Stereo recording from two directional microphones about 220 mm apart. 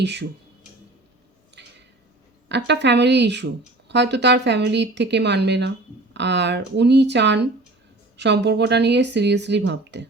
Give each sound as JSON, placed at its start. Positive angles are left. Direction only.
{"t": 0.0, "sound": "speech", "side_deg": -50}
{"t": 2.5, "sound": "speech", "side_deg": -50}